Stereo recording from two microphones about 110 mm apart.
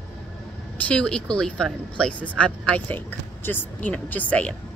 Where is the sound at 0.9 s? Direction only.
10° left (ahead or behind).